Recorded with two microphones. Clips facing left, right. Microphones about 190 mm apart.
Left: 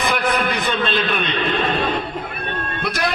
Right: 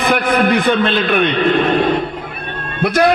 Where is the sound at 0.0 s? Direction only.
60° right (ahead or behind).